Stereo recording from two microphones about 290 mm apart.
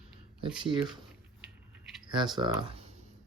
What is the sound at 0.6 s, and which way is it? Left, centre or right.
Speech, centre.